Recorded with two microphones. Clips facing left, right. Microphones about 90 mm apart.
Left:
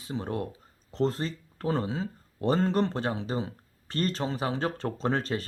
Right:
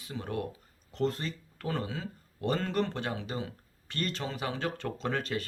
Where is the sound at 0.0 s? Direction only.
30° left (ahead or behind).